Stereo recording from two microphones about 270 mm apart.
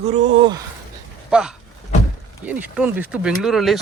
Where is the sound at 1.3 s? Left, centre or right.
Centre.